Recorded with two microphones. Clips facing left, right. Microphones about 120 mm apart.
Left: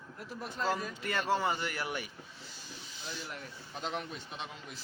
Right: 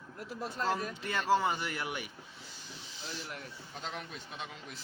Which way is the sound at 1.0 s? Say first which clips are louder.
Left 1 dB; 25° right (ahead or behind).